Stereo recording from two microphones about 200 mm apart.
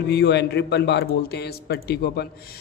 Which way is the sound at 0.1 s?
55° left (ahead or behind).